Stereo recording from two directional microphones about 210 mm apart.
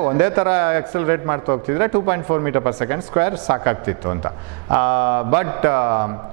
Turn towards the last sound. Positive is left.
turn(degrees=-20)  # may be behind; listen again after turning